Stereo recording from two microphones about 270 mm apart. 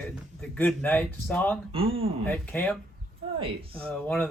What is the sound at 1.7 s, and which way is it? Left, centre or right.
Speech, right.